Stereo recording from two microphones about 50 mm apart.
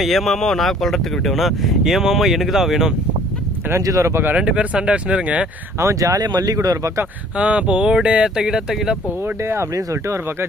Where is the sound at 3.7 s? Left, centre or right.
Right.